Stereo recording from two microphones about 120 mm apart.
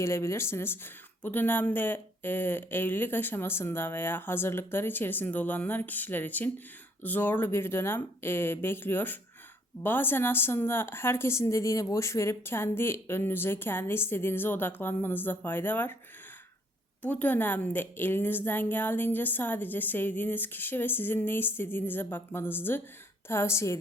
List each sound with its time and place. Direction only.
0.0 s a woman's voice: 20° left (ahead or behind)
17.0 s a woman's voice: 15° left (ahead or behind)